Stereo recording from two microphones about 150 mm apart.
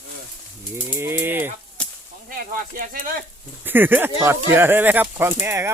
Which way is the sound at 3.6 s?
15° right (ahead or behind).